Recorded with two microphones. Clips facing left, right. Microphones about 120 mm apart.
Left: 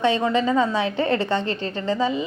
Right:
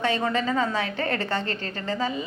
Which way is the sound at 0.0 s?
20° left (ahead or behind).